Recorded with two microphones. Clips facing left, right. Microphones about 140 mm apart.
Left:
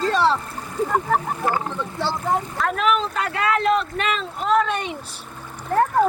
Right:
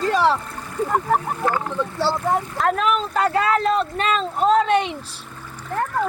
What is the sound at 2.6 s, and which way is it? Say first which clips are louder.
Speech: right 1 dB; 35° right (ahead or behind).